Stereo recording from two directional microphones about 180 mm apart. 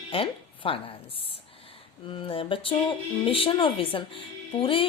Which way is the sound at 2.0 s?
30° left (ahead or behind).